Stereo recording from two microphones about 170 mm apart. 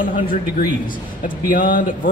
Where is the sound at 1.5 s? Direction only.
55° left (ahead or behind).